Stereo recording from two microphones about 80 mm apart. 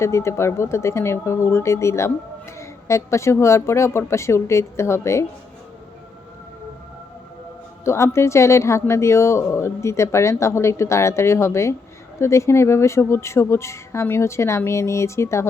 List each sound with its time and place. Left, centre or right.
0.0 s speech: left
7.9 s speech: left